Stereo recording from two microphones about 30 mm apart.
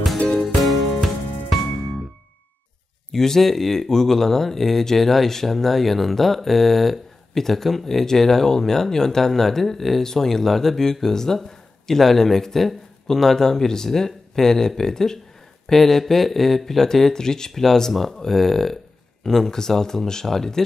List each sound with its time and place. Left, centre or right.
0.4 s music: centre
3.1 s speech: centre
15.7 s speech: centre